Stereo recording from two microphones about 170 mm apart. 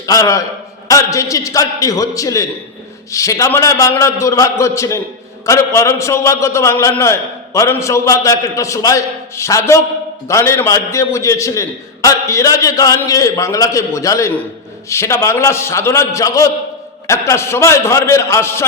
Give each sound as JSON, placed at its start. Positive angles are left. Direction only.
{"t": 0.0, "sound": "a man's voice", "side_deg": 20}